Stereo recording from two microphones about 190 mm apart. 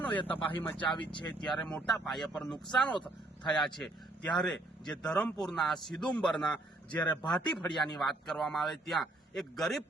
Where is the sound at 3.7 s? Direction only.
5° left (ahead or behind).